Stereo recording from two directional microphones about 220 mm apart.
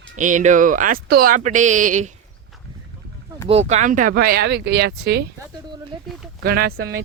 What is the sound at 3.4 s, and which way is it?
Speech, 30° right (ahead or behind).